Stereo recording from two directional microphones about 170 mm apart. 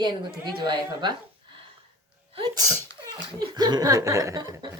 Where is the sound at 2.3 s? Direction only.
30° right (ahead or behind).